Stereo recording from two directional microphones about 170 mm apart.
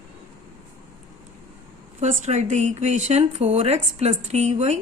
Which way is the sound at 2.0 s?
40° right (ahead or behind).